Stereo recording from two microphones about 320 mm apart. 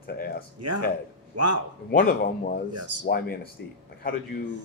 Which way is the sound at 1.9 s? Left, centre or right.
Left.